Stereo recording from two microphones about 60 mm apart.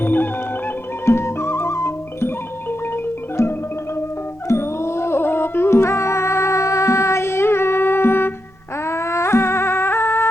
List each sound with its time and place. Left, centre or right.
0.0 s music: left
1.0 s music: left